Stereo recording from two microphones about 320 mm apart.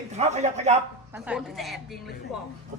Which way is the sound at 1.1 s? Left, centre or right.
Centre.